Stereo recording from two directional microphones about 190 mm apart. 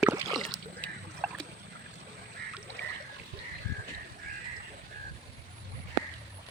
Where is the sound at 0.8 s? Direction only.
5° left (ahead or behind).